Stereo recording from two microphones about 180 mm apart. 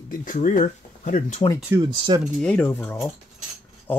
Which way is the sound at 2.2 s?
5° left (ahead or behind).